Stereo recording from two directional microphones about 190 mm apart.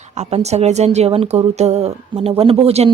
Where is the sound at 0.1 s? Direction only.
35° right (ahead or behind).